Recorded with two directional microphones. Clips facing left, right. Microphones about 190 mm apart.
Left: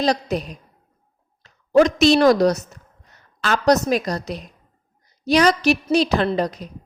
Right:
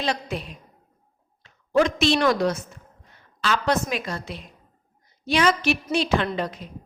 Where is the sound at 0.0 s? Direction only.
40° left (ahead or behind).